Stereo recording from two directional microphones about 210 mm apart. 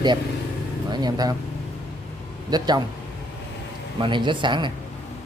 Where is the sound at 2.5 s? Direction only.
20° right (ahead or behind).